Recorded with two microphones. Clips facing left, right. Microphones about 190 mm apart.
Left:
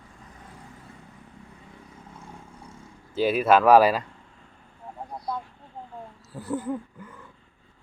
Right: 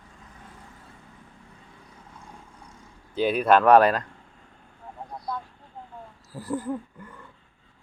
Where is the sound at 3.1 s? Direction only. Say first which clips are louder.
Even; 5° left (ahead or behind).